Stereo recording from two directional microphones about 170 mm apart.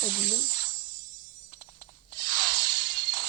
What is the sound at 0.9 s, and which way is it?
Music, 25° right (ahead or behind).